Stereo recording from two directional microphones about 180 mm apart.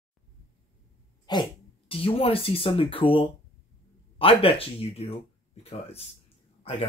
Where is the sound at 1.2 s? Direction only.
25° left (ahead or behind).